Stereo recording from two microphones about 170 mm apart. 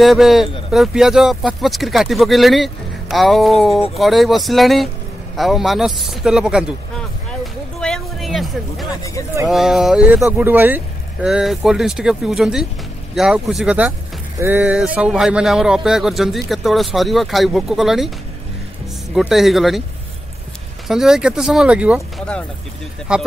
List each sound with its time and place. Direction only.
0.0 s speech: centre (ahead or behind)
7.8 s a sound: 5° left (ahead or behind)
9.5 s speech: centre (ahead or behind)
19.1 s speech: centre (ahead or behind)
20.9 s speech: 5° right (ahead or behind)
23.1 s speech: 5° right (ahead or behind)